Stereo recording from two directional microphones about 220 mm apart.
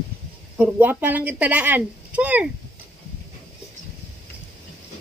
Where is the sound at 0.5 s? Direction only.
5° right (ahead or behind).